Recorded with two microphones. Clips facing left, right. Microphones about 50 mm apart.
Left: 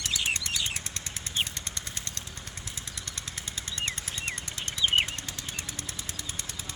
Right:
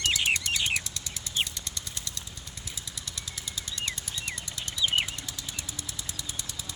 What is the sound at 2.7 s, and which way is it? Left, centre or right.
Jackhammer, left.